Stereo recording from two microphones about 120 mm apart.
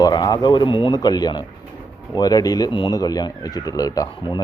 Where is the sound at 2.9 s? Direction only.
30° left (ahead or behind).